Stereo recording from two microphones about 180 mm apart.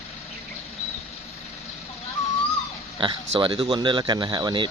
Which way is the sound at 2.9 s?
30° right (ahead or behind).